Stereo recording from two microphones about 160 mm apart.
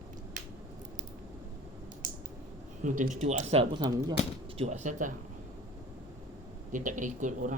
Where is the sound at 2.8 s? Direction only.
50° right (ahead or behind); by 4.2 s 25° right (ahead or behind).